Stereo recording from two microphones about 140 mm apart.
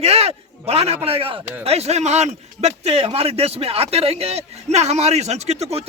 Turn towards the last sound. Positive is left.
turn(degrees=-50)  # may be behind; listen again after turning